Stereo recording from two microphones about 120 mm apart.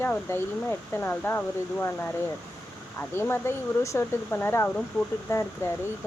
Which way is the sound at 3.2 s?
20° left (ahead or behind).